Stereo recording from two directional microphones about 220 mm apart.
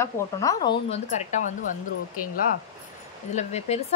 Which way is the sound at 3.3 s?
30° left (ahead or behind).